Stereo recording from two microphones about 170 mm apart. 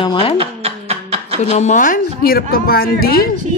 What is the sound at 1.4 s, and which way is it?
Speech, 45° left (ahead or behind).